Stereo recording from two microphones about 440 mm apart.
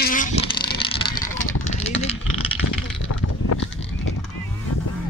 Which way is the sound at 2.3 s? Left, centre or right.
Left.